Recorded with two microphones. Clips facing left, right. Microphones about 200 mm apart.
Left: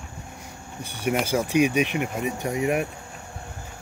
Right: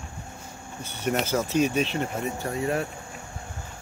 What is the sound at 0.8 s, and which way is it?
Speech, 10° left (ahead or behind).